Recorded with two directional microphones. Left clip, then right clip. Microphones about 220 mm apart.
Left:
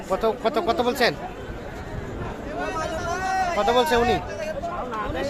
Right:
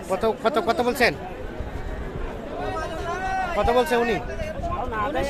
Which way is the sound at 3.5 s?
Centre (ahead or behind).